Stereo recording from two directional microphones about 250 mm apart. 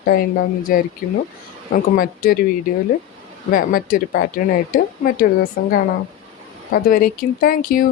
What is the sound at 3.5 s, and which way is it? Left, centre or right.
Speech, left.